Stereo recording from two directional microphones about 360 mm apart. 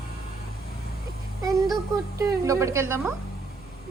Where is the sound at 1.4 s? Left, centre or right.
Centre.